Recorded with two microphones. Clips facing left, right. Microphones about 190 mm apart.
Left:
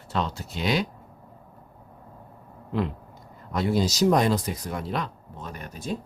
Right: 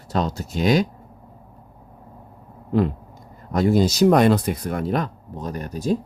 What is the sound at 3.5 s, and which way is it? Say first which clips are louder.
Speech: right 6 dB; 45° right (ahead or behind).